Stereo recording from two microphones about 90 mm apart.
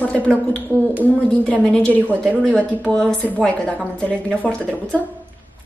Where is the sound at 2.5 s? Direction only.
15° left (ahead or behind).